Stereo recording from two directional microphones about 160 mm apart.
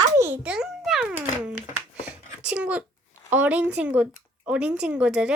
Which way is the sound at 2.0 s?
5° right (ahead or behind).